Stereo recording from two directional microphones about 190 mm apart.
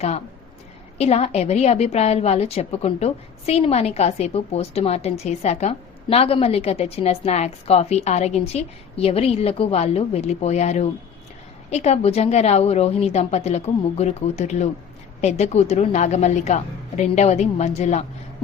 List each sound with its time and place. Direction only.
0.9 s a woman's voice: 35° left (ahead or behind)